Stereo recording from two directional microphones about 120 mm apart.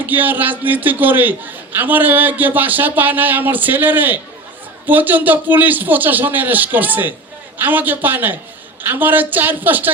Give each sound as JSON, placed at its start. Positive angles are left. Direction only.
{"t": 0.0, "sound": "a man's voice", "side_deg": -15}